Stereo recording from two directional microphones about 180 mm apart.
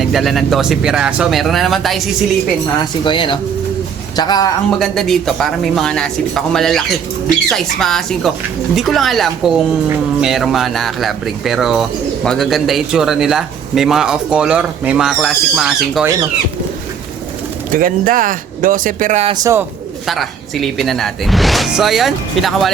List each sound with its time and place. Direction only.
0.0 s speech: centre (ahead or behind)
3.0 s a man's voice: 25° left (ahead or behind)
4.8 s speech: centre (ahead or behind)
17.7 s speech: 50° right (ahead or behind)
19.3 s speech: 20° right (ahead or behind)
20.1 s speech: centre (ahead or behind)